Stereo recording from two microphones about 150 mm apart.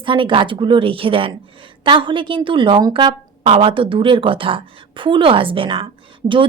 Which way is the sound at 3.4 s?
40° right (ahead or behind).